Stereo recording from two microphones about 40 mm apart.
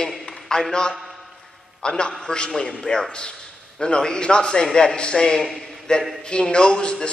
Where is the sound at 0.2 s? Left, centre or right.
Centre.